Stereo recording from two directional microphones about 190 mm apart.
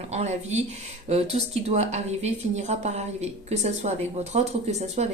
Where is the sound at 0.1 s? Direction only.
35° right (ahead or behind).